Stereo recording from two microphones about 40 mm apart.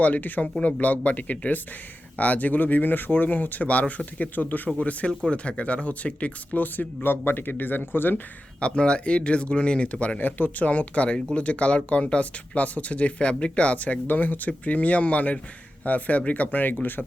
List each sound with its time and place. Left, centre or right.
0.0 s speech: left
4.8 s speech: left
6.6 s speech: left
8.6 s speech: left
14.1 s speech: left